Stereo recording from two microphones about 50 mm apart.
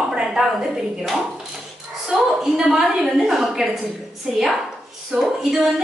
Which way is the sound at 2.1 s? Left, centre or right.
Centre.